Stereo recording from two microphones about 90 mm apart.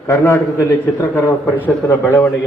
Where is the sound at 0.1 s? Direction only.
30° left (ahead or behind).